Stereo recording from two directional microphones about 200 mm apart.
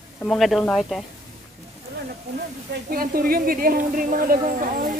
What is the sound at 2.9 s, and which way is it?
A woman's voice, 45° right (ahead or behind).